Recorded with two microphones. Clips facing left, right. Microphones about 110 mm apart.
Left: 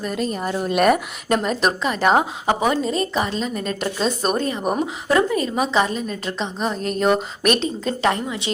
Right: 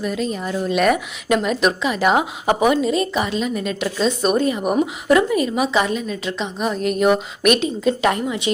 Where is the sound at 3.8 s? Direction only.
40° left (ahead or behind).